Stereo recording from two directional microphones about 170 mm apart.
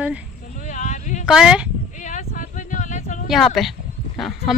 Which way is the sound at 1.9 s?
45° left (ahead or behind).